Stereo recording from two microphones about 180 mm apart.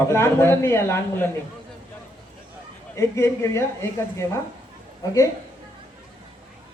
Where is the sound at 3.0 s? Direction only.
15° left (ahead or behind).